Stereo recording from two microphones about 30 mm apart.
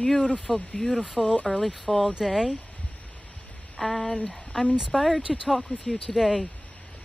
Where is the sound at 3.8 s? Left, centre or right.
Centre.